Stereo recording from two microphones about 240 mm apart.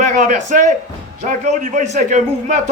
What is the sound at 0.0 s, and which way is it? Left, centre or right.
A man's voice, right.